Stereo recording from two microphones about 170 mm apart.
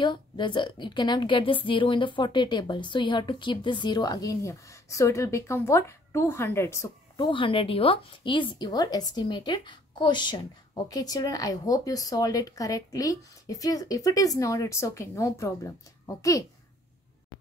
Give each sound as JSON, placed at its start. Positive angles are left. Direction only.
{"t": 0.0, "sound": "speech", "side_deg": 25}
{"t": 7.2, "sound": "speech", "side_deg": 30}